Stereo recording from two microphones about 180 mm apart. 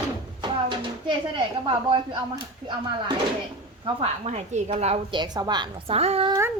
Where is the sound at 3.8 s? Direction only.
35° right (ahead or behind).